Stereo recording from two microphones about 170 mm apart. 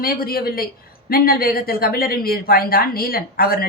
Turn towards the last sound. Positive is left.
turn(degrees=60)  # may be behind; listen again after turning